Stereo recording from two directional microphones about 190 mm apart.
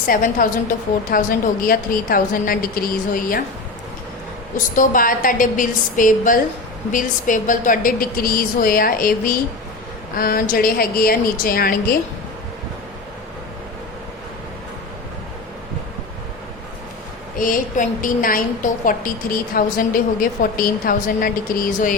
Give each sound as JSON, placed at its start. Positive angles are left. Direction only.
{"t": 0.1, "sound": "a woman's voice", "side_deg": 45}
{"t": 4.5, "sound": "a woman's voice", "side_deg": 45}
{"t": 17.3, "sound": "a woman's voice", "side_deg": 45}